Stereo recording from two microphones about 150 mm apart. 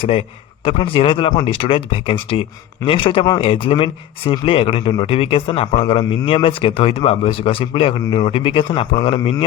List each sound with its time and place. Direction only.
0.0 s speech: 40° left (ahead or behind)